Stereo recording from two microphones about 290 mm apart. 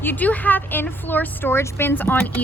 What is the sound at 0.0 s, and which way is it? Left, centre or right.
A woman's voice, centre.